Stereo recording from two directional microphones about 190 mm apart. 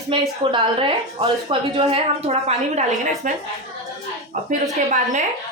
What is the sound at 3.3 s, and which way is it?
Speech, 45° right (ahead or behind).